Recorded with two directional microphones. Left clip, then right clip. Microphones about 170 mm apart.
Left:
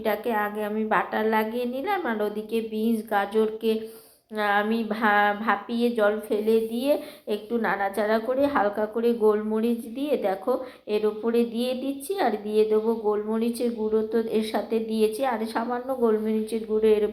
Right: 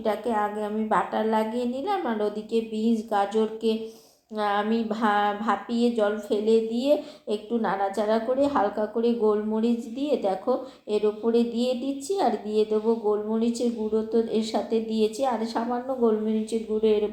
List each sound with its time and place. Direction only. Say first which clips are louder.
0.1 s a woman's voice: even; 25° left (ahead or behind)
0.6 s a woman's voice: even; 10° left (ahead or behind)
13.4 s a woman's voice: even; 5° left (ahead or behind)